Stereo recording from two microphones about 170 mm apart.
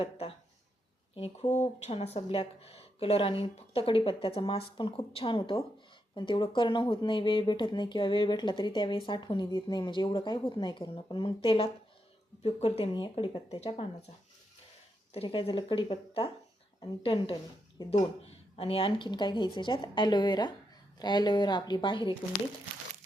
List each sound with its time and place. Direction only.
0.0 s speech: 35° left (ahead or behind)
15.1 s speech: 35° left (ahead or behind)